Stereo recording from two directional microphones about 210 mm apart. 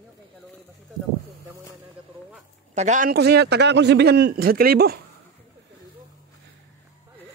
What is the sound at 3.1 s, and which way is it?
Speech, 50° right (ahead or behind).